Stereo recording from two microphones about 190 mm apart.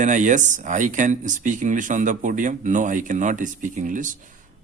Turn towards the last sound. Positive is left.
turn(degrees=-45)  # may be behind; listen again after turning